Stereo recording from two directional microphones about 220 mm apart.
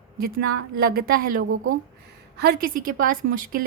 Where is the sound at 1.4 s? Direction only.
65° right (ahead or behind).